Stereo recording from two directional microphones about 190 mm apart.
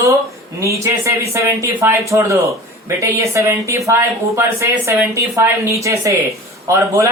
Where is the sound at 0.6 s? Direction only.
15° right (ahead or behind).